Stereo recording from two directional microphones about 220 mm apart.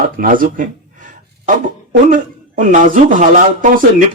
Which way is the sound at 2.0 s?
35° right (ahead or behind).